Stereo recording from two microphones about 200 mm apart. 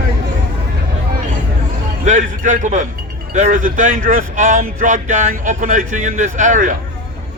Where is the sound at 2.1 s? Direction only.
40° right (ahead or behind).